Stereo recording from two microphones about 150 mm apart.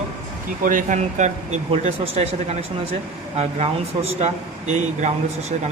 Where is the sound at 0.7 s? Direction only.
60° right (ahead or behind).